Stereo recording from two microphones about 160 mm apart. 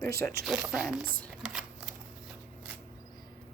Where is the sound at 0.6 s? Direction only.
5° right (ahead or behind).